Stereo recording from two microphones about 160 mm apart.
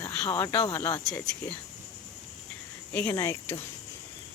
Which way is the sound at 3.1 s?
20° left (ahead or behind).